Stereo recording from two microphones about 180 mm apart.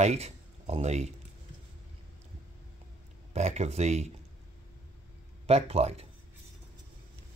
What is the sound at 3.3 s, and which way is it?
Speech, 40° right (ahead or behind).